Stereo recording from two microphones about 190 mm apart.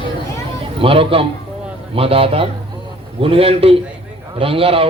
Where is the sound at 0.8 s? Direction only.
30° right (ahead or behind).